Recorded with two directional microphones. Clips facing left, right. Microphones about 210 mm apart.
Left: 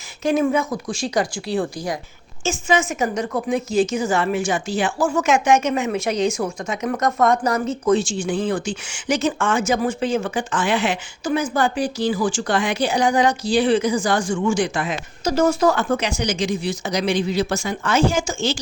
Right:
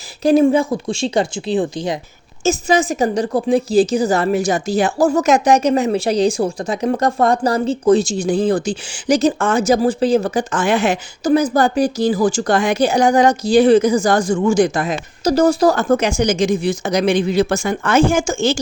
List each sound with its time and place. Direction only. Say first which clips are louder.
0.2 s speech: right 6 dB; 35° right (ahead or behind)
2.4 s a woman's voice: right 5 dB; 40° right (ahead or behind)